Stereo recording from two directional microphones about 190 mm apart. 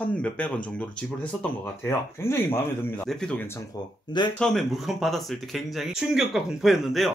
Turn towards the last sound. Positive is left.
turn(degrees=0)  # may be behind; listen again after turning